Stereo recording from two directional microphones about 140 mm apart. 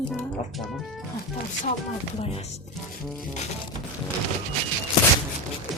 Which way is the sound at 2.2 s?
45° left (ahead or behind).